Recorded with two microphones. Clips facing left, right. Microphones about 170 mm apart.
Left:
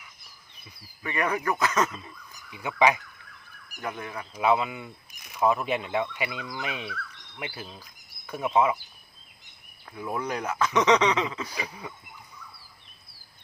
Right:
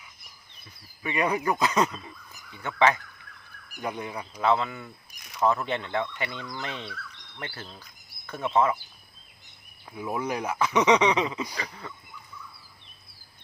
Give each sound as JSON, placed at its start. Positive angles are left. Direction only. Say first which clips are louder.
{"t": 1.0, "sound": "speech", "louder": "right 1 dB", "side_deg": -15}
{"t": 2.5, "sound": "speech", "louder": "even", "side_deg": 10}
{"t": 3.8, "sound": "speech", "louder": "right 2 dB", "side_deg": -15}
{"t": 4.4, "sound": "speech", "louder": "left 1 dB", "side_deg": 10}
{"t": 9.9, "sound": "speech", "louder": "right 1 dB", "side_deg": -10}
{"t": 11.5, "sound": "speech", "louder": "left 1 dB", "side_deg": 10}